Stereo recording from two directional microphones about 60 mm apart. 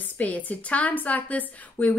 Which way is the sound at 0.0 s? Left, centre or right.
Left.